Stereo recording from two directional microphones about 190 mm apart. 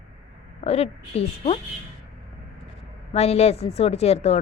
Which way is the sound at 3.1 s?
35° left (ahead or behind).